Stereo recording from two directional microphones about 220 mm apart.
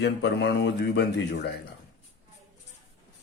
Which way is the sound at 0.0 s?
50° left (ahead or behind).